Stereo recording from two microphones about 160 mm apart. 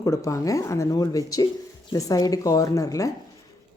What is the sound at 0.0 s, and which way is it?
A woman's voice, 20° left (ahead or behind).